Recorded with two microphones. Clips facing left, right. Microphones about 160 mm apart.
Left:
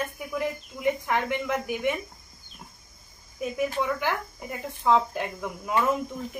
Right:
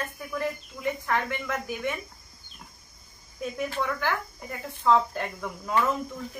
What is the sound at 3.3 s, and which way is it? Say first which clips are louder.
Speech: left 3 dB; 10° left (ahead or behind).